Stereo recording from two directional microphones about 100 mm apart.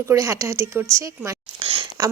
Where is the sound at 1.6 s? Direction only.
65° right (ahead or behind).